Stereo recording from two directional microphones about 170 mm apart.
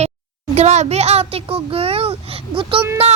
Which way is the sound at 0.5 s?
40° right (ahead or behind).